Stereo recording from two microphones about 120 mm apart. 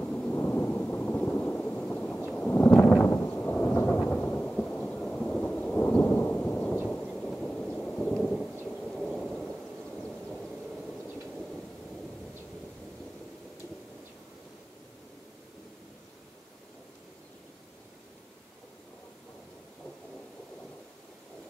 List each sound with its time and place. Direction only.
0.0 s thunder: 15° left (ahead or behind)